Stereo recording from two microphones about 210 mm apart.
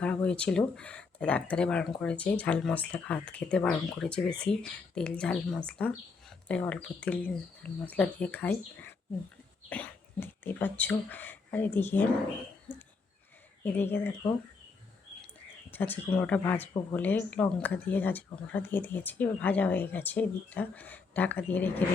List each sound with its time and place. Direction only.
0.0 s speech: 5° left (ahead or behind)
13.7 s speech: 10° left (ahead or behind)
15.7 s speech: 10° left (ahead or behind)